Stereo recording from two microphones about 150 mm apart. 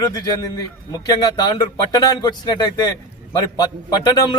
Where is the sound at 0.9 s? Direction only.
25° left (ahead or behind).